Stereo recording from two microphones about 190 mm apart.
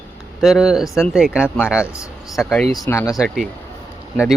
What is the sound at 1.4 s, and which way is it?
Speech, 10° left (ahead or behind).